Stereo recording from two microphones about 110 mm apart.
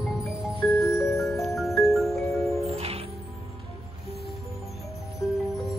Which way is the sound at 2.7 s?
65° right (ahead or behind).